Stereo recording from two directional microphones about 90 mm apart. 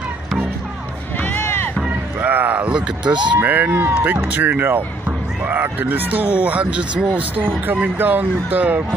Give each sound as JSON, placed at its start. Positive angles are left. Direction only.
{"t": 1.1, "sound": "run", "side_deg": 20}
{"t": 2.2, "sound": "a sound", "side_deg": -20}
{"t": 3.3, "sound": "speech", "side_deg": -20}